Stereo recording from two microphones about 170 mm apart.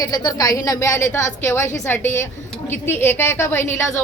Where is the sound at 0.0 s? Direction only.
25° left (ahead or behind).